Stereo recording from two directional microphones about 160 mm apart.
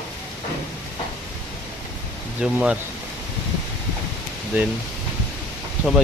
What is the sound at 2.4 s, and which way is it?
Speech, 5° right (ahead or behind).